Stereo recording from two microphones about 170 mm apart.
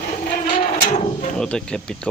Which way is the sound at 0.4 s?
45° left (ahead or behind).